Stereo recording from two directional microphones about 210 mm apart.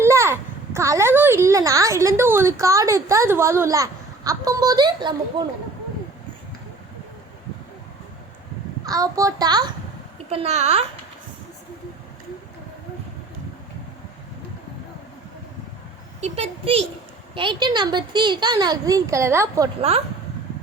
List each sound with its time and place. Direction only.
0.0 s a child's voice: 15° right (ahead or behind)
8.9 s a child's voice: 15° right (ahead or behind)
10.2 s a woman's voice: 30° right (ahead or behind)
16.2 s a woman's voice: 30° right (ahead or behind)